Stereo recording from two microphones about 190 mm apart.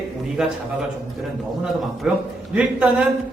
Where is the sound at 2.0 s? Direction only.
5° right (ahead or behind).